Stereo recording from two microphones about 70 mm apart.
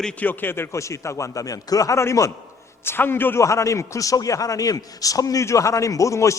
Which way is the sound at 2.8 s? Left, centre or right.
Left.